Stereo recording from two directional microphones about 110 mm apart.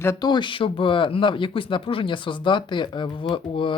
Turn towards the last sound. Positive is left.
turn(degrees=50)  # may be behind; listen again after turning